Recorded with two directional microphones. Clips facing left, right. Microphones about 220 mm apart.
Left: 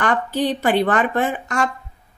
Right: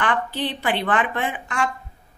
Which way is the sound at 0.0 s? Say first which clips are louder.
Left 4 dB; 45° left (ahead or behind).